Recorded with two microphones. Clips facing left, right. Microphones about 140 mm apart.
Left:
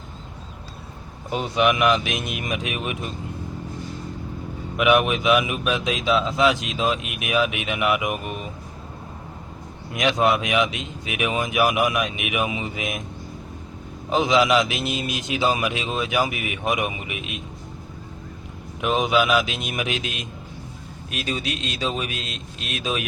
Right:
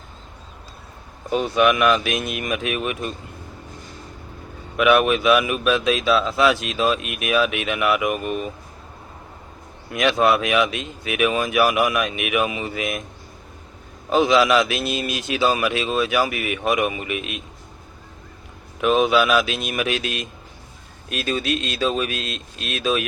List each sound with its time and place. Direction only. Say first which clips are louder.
1.5 s speech: right 1 dB; 20° left (ahead or behind)
4.8 s speech: right 2 dB; 15° left (ahead or behind)
9.9 s speech: right 2 dB; 20° left (ahead or behind)
14.1 s speech: right 2 dB; 20° left (ahead or behind)
18.8 s speech: right 3 dB; 15° left (ahead or behind)